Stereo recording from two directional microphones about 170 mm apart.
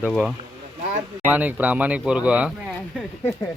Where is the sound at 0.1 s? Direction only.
Centre (ahead or behind).